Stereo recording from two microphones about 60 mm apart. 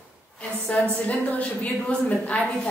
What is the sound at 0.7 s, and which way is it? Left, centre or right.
Speech, centre.